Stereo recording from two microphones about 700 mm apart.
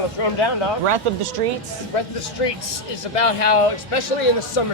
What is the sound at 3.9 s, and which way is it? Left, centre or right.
Speech, left.